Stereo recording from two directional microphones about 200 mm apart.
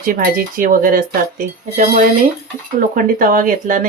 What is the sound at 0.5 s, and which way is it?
Speech, 45° right (ahead or behind).